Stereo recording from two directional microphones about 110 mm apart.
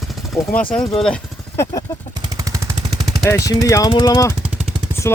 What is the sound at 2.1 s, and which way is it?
Machine gun, 35° right (ahead or behind).